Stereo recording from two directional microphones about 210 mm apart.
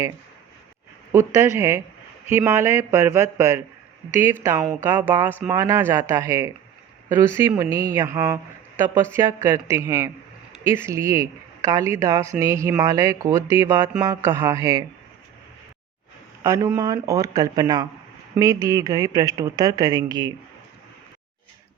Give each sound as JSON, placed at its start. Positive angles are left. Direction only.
{"t": 1.1, "sound": "speech", "side_deg": -15}
{"t": 16.4, "sound": "speech", "side_deg": -15}